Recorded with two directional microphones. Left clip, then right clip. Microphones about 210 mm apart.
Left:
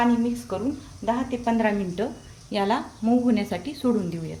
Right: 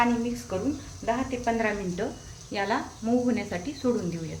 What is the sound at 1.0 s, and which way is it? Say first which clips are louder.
Speech: left 2 dB; 30° left (ahead or behind).